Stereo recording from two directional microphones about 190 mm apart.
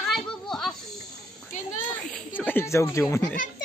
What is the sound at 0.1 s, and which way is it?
Children playing, centre (ahead or behind).